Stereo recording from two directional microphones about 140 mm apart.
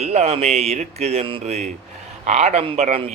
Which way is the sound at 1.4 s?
55° right (ahead or behind).